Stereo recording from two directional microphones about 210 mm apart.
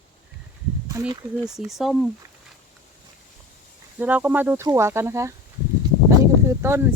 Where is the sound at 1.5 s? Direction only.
Centre (ahead or behind).